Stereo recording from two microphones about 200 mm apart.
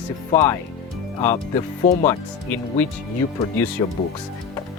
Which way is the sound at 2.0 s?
10° left (ahead or behind).